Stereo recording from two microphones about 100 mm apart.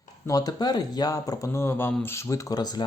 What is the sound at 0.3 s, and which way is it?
Speech, 40° left (ahead or behind).